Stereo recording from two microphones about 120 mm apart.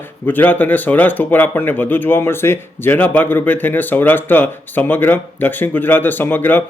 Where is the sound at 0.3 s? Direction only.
15° left (ahead or behind).